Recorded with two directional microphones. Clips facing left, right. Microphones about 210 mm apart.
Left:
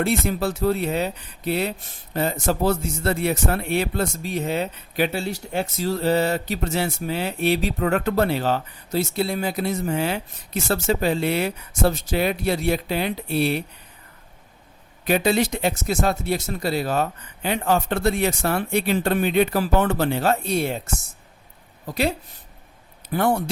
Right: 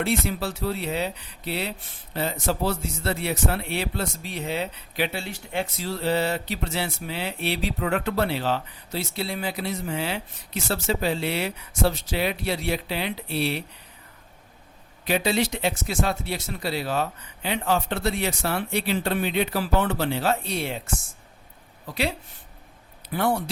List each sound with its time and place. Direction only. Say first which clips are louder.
0.0 s a man's voice: left 4 dB; 45° left (ahead or behind)
15.0 s a man's voice: left 4 dB; 50° left (ahead or behind)
23.0 s a man's voice: left 3 dB; 50° left (ahead or behind)